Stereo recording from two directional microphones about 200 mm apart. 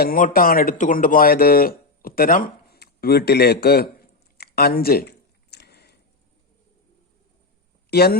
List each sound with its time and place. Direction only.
0.0 s speech: 45° left (ahead or behind)
4.4 s a sound: 50° left (ahead or behind)
7.9 s speech: 50° left (ahead or behind)